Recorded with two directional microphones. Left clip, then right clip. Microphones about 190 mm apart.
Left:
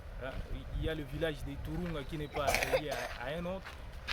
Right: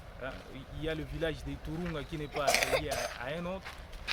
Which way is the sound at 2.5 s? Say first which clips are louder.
Right 3 dB; 40° right (ahead or behind).